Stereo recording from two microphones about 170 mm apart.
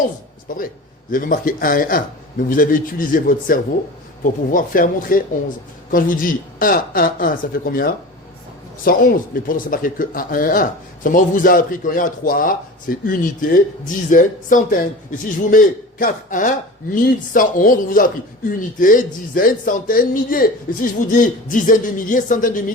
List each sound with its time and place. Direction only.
0.4 s speech: 55° left (ahead or behind)